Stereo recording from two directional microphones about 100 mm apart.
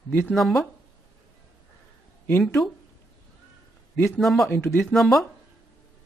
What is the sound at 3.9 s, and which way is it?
Speech, 20° left (ahead or behind).